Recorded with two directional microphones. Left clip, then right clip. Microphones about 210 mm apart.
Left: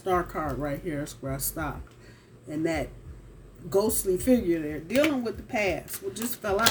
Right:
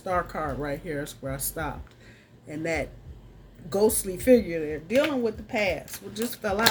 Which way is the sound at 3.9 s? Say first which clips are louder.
Right 4 dB; 25° right (ahead or behind).